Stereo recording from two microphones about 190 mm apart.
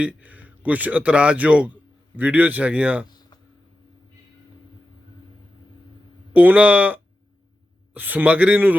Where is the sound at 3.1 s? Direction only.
20° left (ahead or behind).